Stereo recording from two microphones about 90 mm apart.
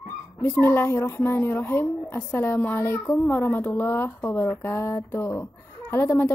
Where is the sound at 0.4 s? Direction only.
25° left (ahead or behind).